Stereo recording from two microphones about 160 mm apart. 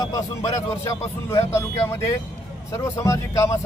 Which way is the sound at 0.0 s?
25° left (ahead or behind).